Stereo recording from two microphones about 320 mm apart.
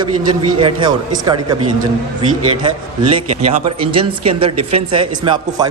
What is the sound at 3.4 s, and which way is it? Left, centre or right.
Speech, centre.